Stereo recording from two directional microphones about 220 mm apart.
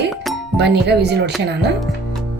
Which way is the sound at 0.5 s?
50° right (ahead or behind).